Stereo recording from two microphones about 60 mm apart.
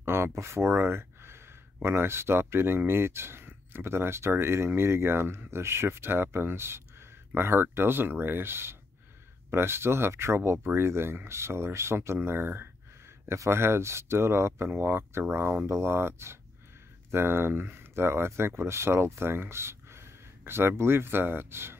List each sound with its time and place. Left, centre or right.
0.0 s speech: right